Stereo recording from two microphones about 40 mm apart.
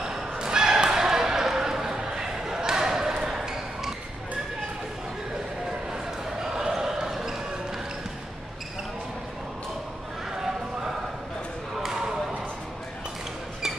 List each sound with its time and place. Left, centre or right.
0.0 s basketball bounce: centre
6.4 s basketball bounce: centre
10.3 s a sound: centre
11.8 s basketball bounce: centre